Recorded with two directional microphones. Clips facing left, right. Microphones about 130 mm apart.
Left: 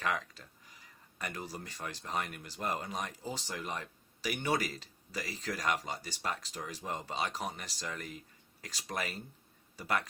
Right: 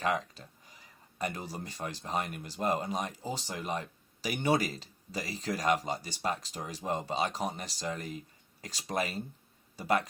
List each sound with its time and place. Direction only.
0.0 s speech: 25° right (ahead or behind)